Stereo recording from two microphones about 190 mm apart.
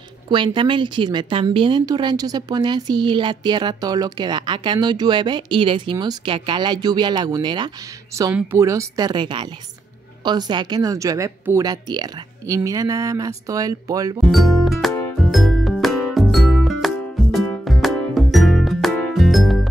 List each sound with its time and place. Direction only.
0.3 s a woman's voice: 25° right (ahead or behind)
14.2 s music: centre (ahead or behind)